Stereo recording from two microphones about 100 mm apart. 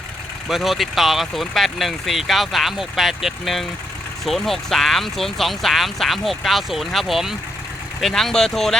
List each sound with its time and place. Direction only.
0.4 s speech: centre (ahead or behind)